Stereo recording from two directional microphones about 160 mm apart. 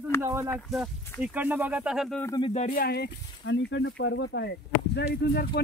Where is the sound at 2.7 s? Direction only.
70° left (ahead or behind).